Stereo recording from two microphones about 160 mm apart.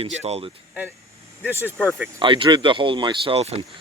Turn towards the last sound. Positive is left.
turn(degrees=-40)  # may be behind; listen again after turning